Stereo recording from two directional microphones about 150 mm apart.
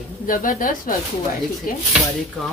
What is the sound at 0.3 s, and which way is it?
Speech, 70° left (ahead or behind).